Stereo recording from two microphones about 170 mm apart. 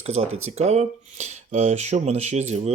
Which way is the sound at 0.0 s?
40° right (ahead or behind).